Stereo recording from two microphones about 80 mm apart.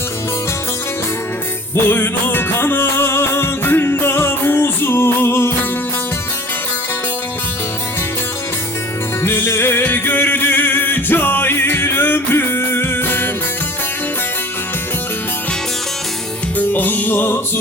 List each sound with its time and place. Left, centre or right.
1.7 s music: left
9.2 s music: left
16.6 s music: left